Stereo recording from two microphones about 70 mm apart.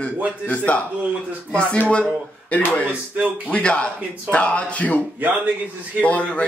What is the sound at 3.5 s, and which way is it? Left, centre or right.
A man's voice, centre.